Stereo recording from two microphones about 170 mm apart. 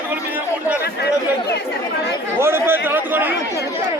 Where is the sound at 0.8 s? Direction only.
75° left (ahead or behind).